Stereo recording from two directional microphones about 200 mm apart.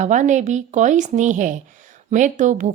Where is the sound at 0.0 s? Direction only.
35° right (ahead or behind).